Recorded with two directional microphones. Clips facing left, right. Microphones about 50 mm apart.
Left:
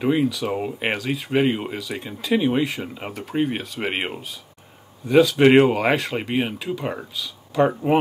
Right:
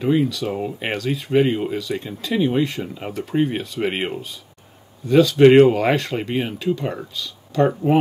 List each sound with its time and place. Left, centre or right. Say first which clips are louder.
0.0 s speech: right 1 dB; centre